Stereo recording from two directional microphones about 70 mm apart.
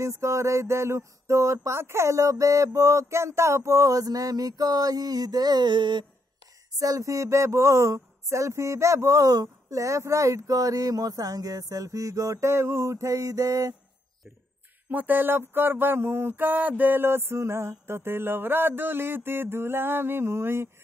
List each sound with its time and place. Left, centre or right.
0.0 s speech: right
6.8 s speech: right
14.9 s mantra: right